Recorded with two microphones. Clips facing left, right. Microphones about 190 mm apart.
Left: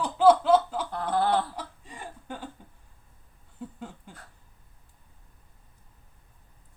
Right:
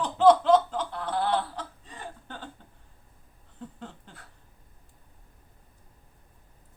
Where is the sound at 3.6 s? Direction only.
10° left (ahead or behind).